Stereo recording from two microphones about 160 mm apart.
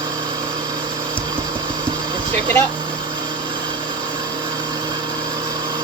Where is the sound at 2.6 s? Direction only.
30° right (ahead or behind).